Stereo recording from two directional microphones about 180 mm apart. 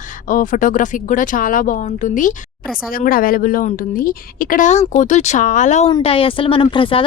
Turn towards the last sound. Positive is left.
turn(degrees=30)  # may be behind; listen again after turning